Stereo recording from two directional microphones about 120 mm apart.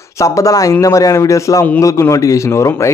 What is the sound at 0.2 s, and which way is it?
Speech, 25° left (ahead or behind).